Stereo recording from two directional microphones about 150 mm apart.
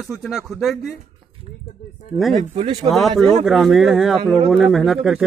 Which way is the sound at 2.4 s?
45° right (ahead or behind).